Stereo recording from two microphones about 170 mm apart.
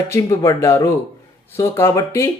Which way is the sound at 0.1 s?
15° left (ahead or behind).